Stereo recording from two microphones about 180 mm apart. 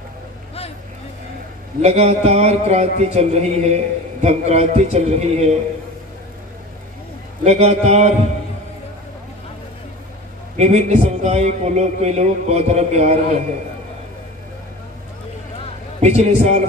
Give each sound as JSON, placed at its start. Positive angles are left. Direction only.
{"t": 1.8, "sound": "a man's voice", "side_deg": -35}
{"t": 7.4, "sound": "a man's voice", "side_deg": -35}
{"t": 10.6, "sound": "a man's voice", "side_deg": -40}
{"t": 16.0, "sound": "a man's voice", "side_deg": -35}